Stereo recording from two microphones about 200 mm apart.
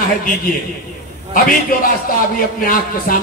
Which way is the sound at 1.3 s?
45° left (ahead or behind).